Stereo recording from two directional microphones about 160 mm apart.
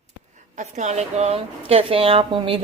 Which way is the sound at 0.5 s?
45° right (ahead or behind).